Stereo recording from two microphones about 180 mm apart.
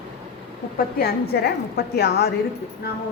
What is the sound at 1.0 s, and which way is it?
A woman's voice, 60° left (ahead or behind).